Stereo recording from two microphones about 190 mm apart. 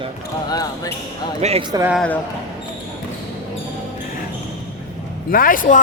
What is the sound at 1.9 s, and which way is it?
Speech, 5° left (ahead or behind).